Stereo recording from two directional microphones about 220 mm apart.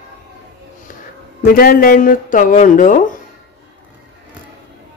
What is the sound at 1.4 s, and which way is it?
A man's voice, 40° left (ahead or behind).